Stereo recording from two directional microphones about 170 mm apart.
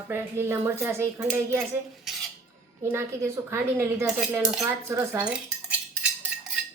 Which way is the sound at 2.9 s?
15° right (ahead or behind).